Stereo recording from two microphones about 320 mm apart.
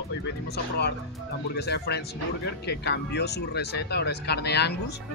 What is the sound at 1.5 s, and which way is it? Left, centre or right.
Speech, left.